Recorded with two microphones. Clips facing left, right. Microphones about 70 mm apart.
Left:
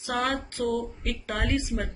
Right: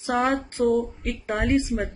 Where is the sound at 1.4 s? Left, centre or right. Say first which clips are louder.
Right 6 dB; right.